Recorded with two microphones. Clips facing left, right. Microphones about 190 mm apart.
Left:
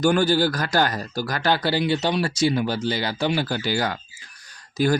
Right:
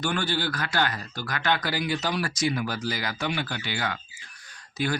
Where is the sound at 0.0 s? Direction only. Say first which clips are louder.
Left 9 dB; 40° left (ahead or behind).